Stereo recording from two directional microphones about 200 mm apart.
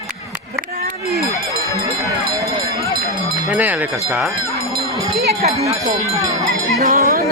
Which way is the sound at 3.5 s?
10° right (ahead or behind).